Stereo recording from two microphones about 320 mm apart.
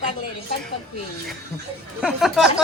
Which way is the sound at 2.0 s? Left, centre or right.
Centre.